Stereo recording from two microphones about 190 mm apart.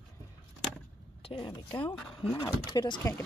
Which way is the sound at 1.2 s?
25° left (ahead or behind).